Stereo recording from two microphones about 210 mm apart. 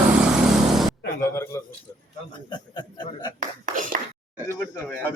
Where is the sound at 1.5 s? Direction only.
10° left (ahead or behind).